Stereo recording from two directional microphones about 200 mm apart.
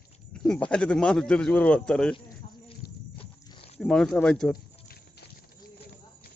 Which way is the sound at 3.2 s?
25° left (ahead or behind).